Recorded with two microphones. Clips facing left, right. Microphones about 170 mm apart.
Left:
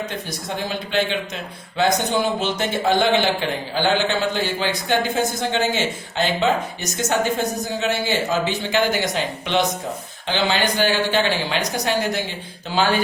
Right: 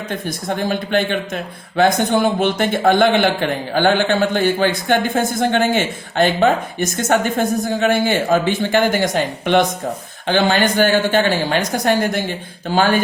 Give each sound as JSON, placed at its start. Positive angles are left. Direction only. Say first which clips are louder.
{"t": 0.3, "sound": "a man's voice", "louder": "right 6 dB", "side_deg": -50}